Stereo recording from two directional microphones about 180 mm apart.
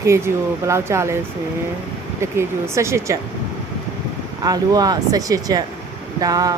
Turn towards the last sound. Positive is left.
turn(degrees=-20)  # may be behind; listen again after turning